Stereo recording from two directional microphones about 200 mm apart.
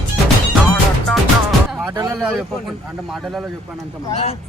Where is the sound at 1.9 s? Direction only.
15° right (ahead or behind).